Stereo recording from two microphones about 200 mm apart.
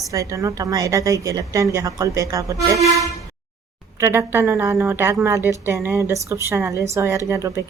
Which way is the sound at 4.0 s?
15° right (ahead or behind).